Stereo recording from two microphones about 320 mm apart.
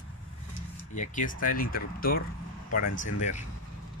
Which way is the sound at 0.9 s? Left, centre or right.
Left.